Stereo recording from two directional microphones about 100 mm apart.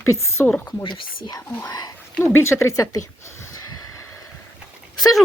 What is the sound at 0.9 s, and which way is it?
Speech, 40° left (ahead or behind).